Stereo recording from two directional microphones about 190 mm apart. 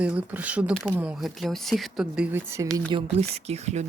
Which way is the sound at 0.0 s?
5° right (ahead or behind).